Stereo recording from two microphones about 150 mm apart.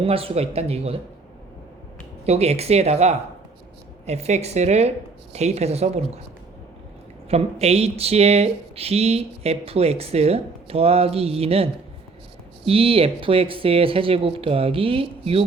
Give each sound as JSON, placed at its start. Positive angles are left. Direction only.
{"t": 0.0, "sound": "speech", "side_deg": -40}
{"t": 2.2, "sound": "speech", "side_deg": -45}
{"t": 7.3, "sound": "speech", "side_deg": -45}